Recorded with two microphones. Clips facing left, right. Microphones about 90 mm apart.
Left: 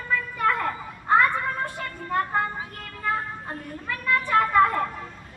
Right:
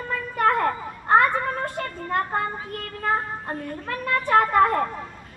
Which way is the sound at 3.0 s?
45° right (ahead or behind).